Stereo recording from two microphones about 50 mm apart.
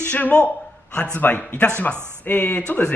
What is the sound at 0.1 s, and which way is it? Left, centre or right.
Speech, left.